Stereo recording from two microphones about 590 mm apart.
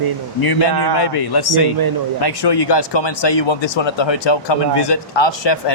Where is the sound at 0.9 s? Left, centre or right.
Left.